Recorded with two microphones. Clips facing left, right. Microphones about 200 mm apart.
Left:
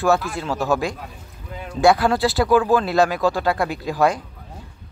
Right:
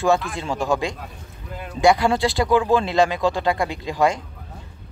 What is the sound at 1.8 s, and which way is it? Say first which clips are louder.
Speech: left 1 dB; 15° right (ahead or behind).